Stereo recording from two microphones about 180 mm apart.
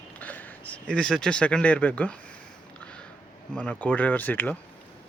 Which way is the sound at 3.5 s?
5° left (ahead or behind).